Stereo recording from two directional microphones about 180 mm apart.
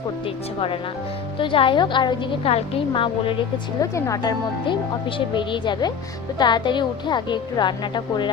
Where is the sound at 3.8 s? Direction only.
15° left (ahead or behind).